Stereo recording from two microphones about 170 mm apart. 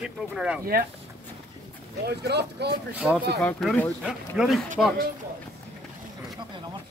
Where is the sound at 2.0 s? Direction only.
75° right (ahead or behind).